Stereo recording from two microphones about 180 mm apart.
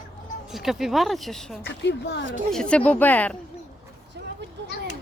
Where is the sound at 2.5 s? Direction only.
5° left (ahead or behind).